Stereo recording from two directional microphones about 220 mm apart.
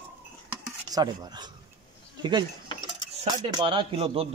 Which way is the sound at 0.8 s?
15° right (ahead or behind).